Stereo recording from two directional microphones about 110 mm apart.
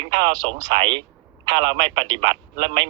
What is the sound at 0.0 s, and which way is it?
A man's voice, 45° right (ahead or behind).